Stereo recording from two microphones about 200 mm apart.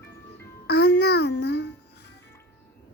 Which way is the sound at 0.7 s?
55° left (ahead or behind).